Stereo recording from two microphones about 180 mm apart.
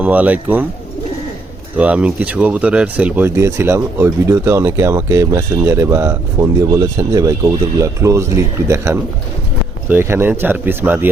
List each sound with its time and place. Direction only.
0.0 s speech: 10° right (ahead or behind)
1.8 s speech: 5° right (ahead or behind)